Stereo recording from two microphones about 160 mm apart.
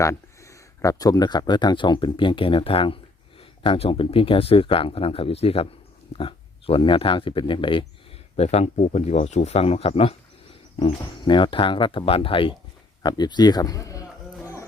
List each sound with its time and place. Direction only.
0.0 s a man's voice: 20° left (ahead or behind)